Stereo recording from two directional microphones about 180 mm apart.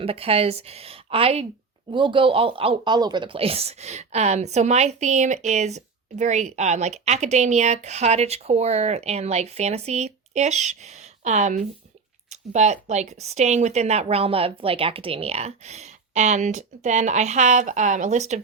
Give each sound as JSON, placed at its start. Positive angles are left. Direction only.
{"t": 0.0, "sound": "speech", "side_deg": -30}